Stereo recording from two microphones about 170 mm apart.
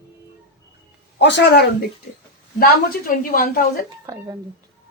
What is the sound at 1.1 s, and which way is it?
Speech, 90° left.